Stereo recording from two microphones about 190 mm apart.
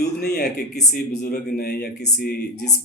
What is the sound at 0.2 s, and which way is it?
A man's voice, 55° left (ahead or behind).